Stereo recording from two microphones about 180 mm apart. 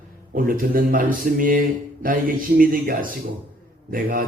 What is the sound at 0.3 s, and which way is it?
Speech, 50° right (ahead or behind).